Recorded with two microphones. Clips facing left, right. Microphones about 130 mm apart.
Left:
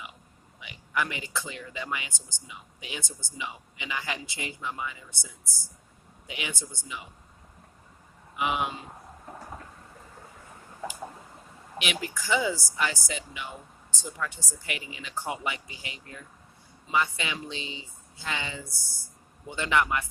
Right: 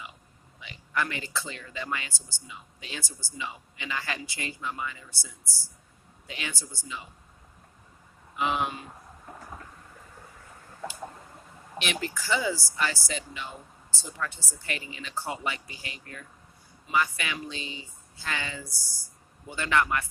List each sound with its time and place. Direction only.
0.6 s speech: 15° left (ahead or behind)
8.4 s speech: 15° left (ahead or behind)
10.8 s a sound: 15° left (ahead or behind)
11.8 s speech: 15° left (ahead or behind)